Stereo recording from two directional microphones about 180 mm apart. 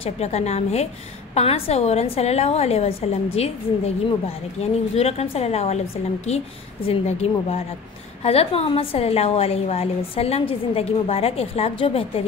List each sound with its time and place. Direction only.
0.0 s a woman's voice: 35° left (ahead or behind)